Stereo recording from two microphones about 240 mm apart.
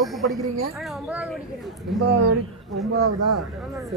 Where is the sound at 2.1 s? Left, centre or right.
Right.